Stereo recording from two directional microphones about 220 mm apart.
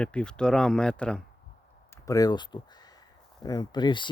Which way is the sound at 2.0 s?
15° left (ahead or behind).